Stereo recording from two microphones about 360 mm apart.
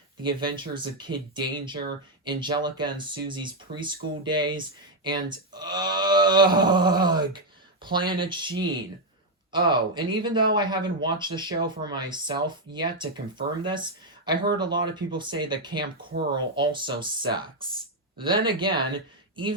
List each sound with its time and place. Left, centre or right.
0.2 s speech: centre
16.0 s speech: right
16.3 s speech: centre